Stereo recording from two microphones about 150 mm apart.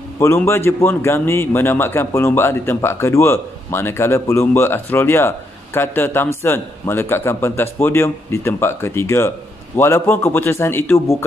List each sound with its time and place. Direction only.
0.2 s a man's voice: 15° left (ahead or behind)